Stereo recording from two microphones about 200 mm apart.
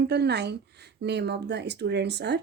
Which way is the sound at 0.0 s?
55° right (ahead or behind).